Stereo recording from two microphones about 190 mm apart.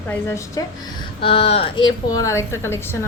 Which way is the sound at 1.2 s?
30° left (ahead or behind).